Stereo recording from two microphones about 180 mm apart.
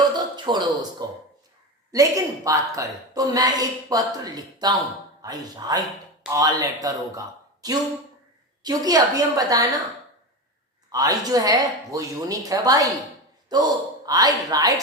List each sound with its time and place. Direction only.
0.0 s a sound: 25° right (ahead or behind)
1.9 s a woman's voice: 20° right (ahead or behind)
10.9 s a woman's voice: 20° right (ahead or behind)